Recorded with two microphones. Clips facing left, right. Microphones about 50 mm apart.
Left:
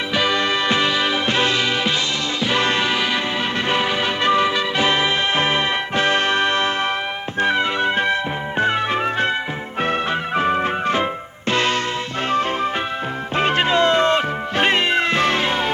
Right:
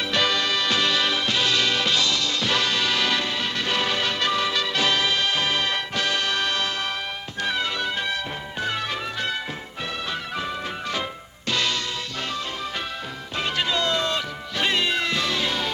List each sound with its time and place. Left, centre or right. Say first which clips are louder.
0.1 s music: left 3 dB; centre
0.3 s music: left 5 dB; left
1.3 s music: left 4 dB; left
13.3 s music: left 8 dB; left